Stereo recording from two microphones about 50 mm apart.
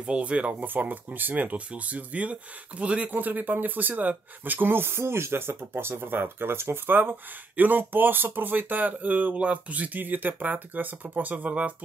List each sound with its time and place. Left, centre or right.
0.0 s speech: right
3.1 s speech: right
9.3 s speech: right